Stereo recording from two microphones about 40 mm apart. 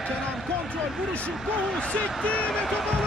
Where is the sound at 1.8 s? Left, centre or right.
Left.